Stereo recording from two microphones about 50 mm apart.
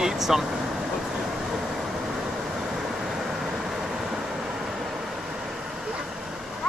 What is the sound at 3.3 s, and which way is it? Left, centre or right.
Vehicle, centre.